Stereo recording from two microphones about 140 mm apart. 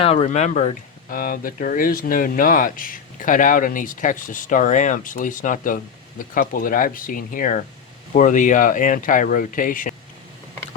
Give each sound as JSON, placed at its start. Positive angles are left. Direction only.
{"t": 0.0, "sound": "speech", "side_deg": 45}